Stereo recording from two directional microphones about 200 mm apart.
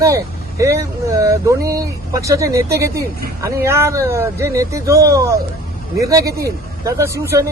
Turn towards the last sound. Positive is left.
turn(degrees=-15)  # may be behind; listen again after turning